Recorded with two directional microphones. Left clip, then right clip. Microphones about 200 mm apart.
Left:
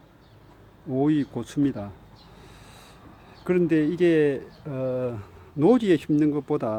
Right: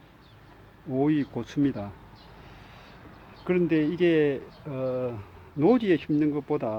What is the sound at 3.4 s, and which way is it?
Speech, 15° left (ahead or behind).